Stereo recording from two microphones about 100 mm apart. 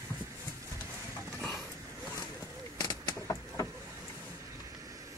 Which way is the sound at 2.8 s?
45° left (ahead or behind).